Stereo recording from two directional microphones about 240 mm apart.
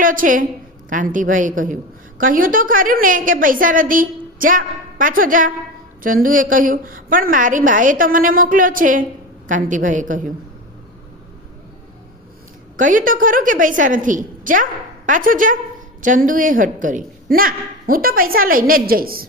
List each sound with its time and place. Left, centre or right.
0.0 s a woman's voice: right
12.7 s a woman's voice: right